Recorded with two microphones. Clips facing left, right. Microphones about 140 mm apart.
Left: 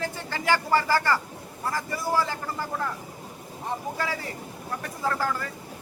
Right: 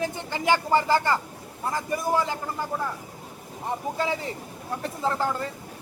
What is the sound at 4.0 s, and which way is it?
Speech, 20° right (ahead or behind).